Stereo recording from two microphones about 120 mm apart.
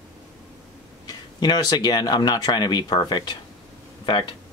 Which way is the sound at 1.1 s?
35° left (ahead or behind).